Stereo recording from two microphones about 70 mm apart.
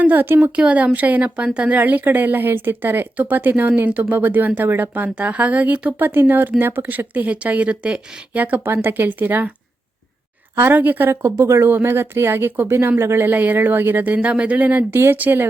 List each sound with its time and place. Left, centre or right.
0.0 s speech: right
10.6 s speech: right
11.1 s speech: right